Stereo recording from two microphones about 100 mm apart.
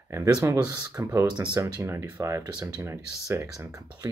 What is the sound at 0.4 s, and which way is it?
Speech, 35° right (ahead or behind).